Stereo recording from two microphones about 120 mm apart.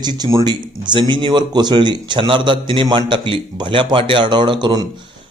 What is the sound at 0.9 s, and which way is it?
A man's voice, 40° right (ahead or behind).